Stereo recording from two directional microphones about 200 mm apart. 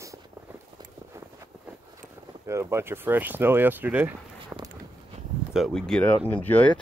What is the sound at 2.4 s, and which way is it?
Speech, 15° right (ahead or behind).